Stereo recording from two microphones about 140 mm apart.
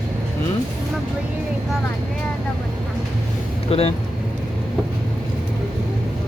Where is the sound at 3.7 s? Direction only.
45° left (ahead or behind).